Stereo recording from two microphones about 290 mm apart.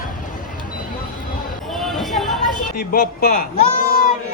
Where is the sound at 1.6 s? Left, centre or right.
Centre.